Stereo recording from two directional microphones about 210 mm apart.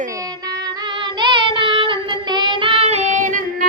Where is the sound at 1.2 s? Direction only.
20° right (ahead or behind).